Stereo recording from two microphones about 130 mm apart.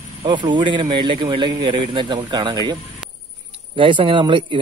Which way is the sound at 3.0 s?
5° right (ahead or behind).